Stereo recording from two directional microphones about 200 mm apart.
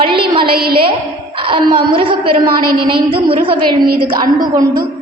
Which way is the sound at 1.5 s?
25° right (ahead or behind).